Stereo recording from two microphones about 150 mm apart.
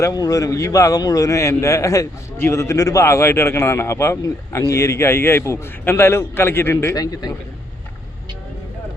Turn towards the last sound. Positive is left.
turn(degrees=25)  # may be behind; listen again after turning